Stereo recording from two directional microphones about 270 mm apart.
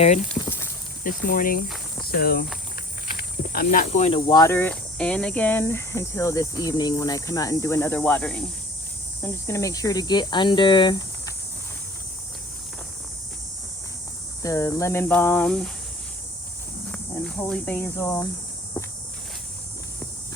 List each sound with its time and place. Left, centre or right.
0.3 s a sound: centre
1.0 s speech: left
14.4 s speech: centre
16.9 s speech: centre